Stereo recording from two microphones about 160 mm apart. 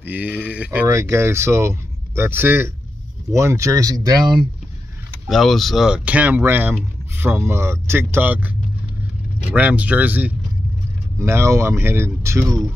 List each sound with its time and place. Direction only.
0.0 s speech: 10° right (ahead or behind); by 4.5 s 25° right (ahead or behind)
5.2 s speech: centre (ahead or behind); by 12.5 s 20° right (ahead or behind)